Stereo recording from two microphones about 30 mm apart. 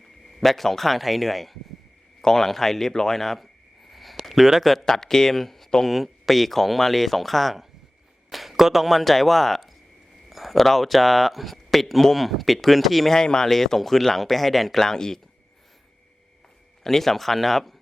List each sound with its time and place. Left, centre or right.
0.3 s speech: centre
2.2 s speech: centre
3.2 s a sound: centre
4.6 s speech: centre
4.9 s speech: centre
10.2 s a sound: centre
10.6 s speech: centre
13.2 s speech: left
13.5 s speech: centre
16.8 s speech: centre